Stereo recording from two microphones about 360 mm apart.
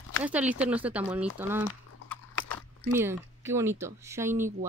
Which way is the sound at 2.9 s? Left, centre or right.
Centre.